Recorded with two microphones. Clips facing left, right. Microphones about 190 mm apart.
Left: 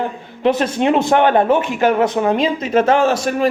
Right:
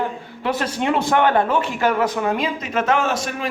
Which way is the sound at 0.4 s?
20° left (ahead or behind).